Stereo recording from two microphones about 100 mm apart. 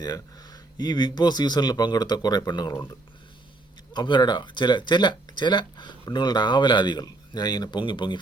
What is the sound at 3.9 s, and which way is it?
Speech, 50° left (ahead or behind).